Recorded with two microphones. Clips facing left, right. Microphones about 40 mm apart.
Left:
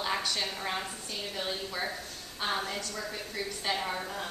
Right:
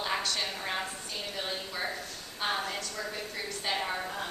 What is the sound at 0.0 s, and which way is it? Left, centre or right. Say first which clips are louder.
A woman's voice: even; centre.